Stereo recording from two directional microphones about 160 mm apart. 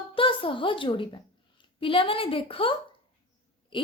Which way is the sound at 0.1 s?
35° left (ahead or behind).